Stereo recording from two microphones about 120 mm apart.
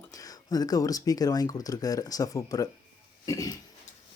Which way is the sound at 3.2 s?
30° left (ahead or behind).